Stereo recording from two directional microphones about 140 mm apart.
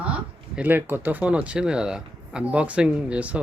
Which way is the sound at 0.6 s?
15° right (ahead or behind).